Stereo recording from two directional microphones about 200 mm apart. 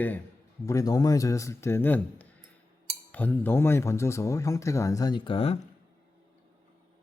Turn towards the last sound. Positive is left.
turn(degrees=30)  # may be behind; listen again after turning